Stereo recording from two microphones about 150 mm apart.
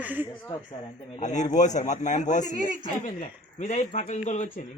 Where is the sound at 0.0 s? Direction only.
10° right (ahead or behind).